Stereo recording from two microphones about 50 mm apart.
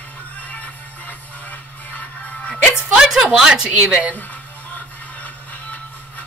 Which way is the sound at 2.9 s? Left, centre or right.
Centre.